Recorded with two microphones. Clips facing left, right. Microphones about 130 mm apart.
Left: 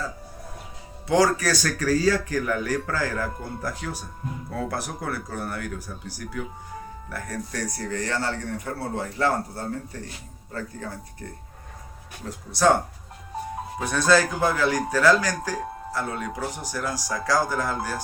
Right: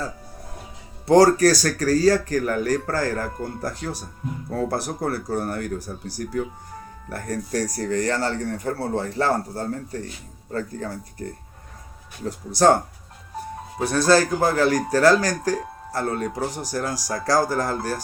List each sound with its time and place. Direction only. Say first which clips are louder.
1.0 s speech: right 6 dB; 40° right (ahead or behind)
12.5 s speech: right 3 dB; 40° right (ahead or behind)
13.7 s speech: right 3 dB; 35° right (ahead or behind)